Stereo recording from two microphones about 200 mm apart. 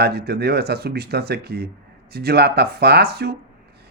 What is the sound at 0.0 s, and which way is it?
Speech, 50° right (ahead or behind).